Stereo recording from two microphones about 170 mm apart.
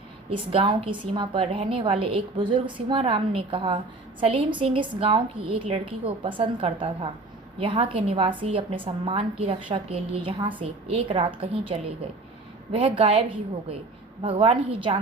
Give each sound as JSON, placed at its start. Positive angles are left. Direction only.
{"t": 0.3, "sound": "a woman's voice", "side_deg": -30}